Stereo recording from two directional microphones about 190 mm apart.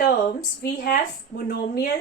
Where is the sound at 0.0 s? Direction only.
50° left (ahead or behind).